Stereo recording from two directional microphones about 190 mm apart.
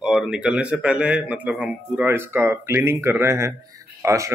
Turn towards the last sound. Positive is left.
turn(degrees=-15)  # may be behind; listen again after turning